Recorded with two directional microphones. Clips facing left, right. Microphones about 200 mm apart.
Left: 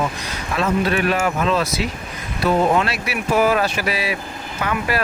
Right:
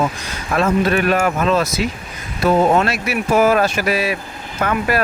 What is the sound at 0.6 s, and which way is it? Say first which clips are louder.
Speech: right 3 dB; 50° right (ahead or behind).